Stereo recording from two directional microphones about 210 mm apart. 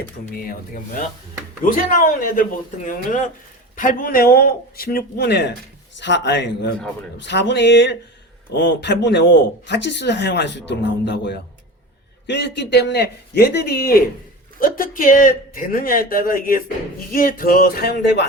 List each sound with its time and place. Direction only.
0.4 s speech: 40° left (ahead or behind)